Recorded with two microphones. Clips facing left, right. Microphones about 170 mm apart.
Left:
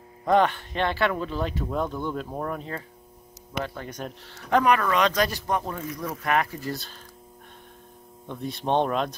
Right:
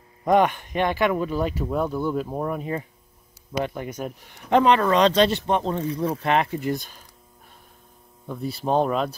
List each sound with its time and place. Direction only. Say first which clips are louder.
0.2 s speech: right 2 dB; 15° right (ahead or behind)
8.3 s speech: right 2 dB; 5° right (ahead or behind)